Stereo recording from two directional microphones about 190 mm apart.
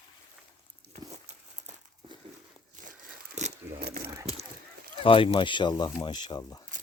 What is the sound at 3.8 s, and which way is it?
Mechanisms, 55° right (ahead or behind).